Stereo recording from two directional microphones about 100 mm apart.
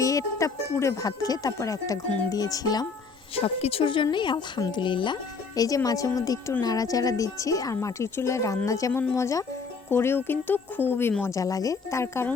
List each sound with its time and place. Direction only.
0.0 s speech: 35° left (ahead or behind)
3.3 s speech: 80° left; by 5.1 s 55° left (ahead or behind)
5.5 s speech: 35° left (ahead or behind); by 11.1 s 20° left (ahead or behind)
11.2 s speech: 30° left (ahead or behind)